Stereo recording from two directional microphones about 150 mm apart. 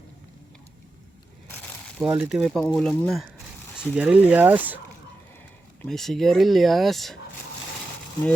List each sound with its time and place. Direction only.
2.0 s speech: 10° right (ahead or behind)
2.4 s speech: centre (ahead or behind)
3.8 s speech: 10° right (ahead or behind)
5.8 s speech: 5° left (ahead or behind)